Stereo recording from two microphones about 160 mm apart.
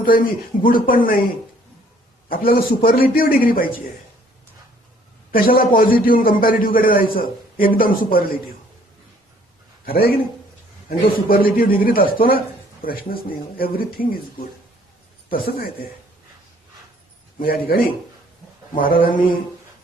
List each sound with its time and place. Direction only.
0.6 s a man's voice: 60° left (ahead or behind)
2.3 s a man's voice: 65° left (ahead or behind)
5.3 s a man's voice: 65° left (ahead or behind)
9.8 s a man's voice: 70° left (ahead or behind)
15.3 s speech: 65° left (ahead or behind)
17.4 s a man's voice: 65° left (ahead or behind)